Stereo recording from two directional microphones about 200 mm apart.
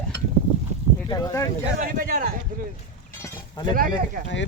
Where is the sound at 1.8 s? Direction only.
45° right (ahead or behind).